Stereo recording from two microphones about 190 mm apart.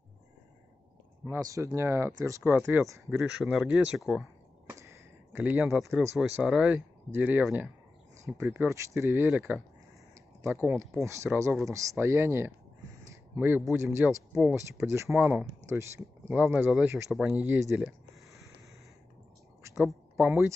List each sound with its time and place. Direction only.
1.2 s speech: 15° right (ahead or behind); by 4.3 s centre (ahead or behind)
4.6 s speech: 15° right (ahead or behind)
13.1 s a sound: 10° right (ahead or behind)
14.0 s speech: 5° right (ahead or behind)
19.9 s speech: 5° right (ahead or behind)